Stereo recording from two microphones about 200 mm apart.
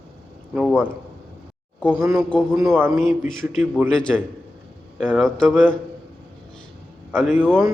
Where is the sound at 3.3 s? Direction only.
Centre (ahead or behind).